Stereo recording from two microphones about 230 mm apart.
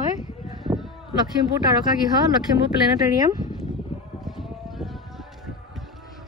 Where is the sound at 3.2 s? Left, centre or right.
Centre.